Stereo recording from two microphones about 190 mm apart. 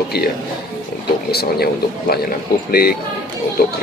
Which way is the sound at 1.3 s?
55° left (ahead or behind).